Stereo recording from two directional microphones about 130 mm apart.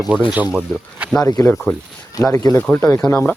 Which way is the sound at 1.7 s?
20° left (ahead or behind).